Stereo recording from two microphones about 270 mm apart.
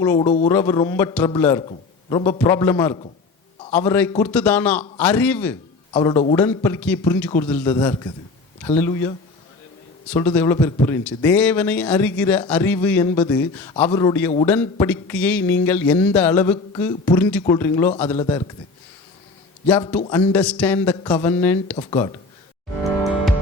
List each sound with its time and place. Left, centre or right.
0.0 s speech: centre
5.9 s speech: centre
19.9 s speech: centre